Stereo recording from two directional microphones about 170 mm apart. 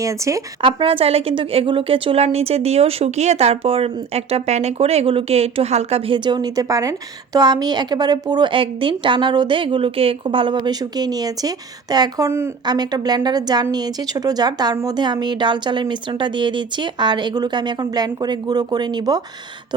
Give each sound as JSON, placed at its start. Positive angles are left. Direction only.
{"t": 0.0, "sound": "a woman's voice", "side_deg": -20}
{"t": 0.6, "sound": "a woman's voice", "side_deg": -30}